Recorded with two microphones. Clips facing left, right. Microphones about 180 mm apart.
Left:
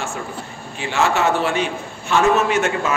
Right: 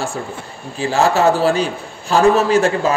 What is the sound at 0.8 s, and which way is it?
A man's voice, 35° right (ahead or behind).